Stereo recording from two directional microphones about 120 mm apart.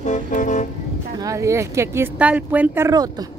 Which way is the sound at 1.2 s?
25° right (ahead or behind).